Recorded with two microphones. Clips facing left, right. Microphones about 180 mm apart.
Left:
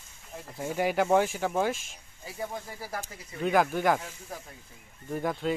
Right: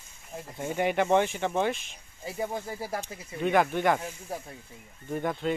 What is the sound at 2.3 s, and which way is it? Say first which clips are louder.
Speech: right 4 dB; 25° right (ahead or behind).